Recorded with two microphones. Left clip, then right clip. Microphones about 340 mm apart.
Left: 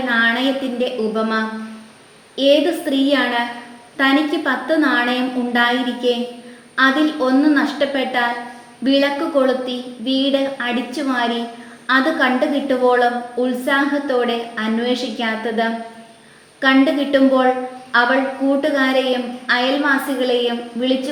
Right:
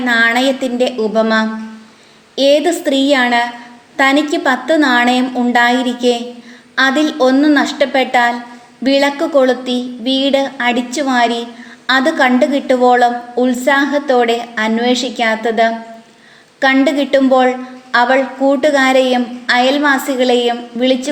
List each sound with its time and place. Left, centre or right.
0.1 s a woman's voice: right